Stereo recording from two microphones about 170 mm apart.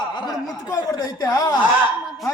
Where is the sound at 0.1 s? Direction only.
25° left (ahead or behind).